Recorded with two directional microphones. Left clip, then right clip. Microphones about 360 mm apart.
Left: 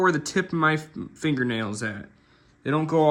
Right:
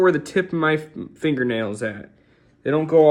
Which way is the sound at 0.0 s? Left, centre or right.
Centre.